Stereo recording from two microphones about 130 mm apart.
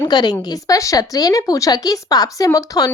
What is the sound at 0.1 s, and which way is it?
A woman's voice, 30° left (ahead or behind).